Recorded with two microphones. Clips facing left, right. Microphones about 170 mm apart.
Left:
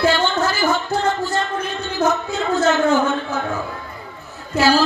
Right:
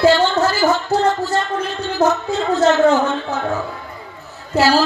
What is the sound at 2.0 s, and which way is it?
Speech, 65° right (ahead or behind).